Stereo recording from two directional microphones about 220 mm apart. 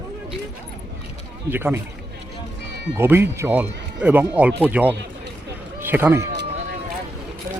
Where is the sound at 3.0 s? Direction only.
10° right (ahead or behind).